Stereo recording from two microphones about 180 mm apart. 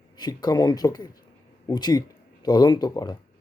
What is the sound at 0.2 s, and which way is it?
Speech, 25° left (ahead or behind).